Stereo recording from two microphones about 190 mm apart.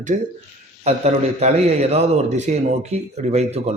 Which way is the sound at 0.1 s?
45° right (ahead or behind).